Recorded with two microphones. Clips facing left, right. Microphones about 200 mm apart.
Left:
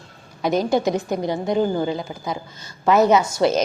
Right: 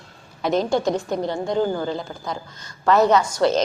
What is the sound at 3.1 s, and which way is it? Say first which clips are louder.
Speech: left 1 dB; 5° left (ahead or behind).